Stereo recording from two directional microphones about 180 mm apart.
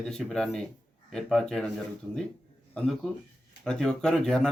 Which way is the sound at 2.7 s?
5° left (ahead or behind).